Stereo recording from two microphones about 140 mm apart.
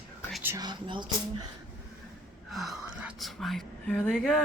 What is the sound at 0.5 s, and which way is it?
Speech, 30° right (ahead or behind).